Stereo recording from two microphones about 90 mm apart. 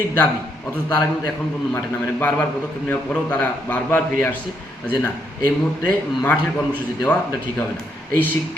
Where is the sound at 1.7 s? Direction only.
20° left (ahead or behind).